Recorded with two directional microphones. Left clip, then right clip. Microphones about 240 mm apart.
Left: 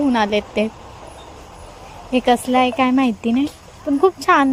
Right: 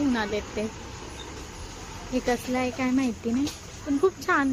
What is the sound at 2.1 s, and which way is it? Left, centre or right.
Speech, left.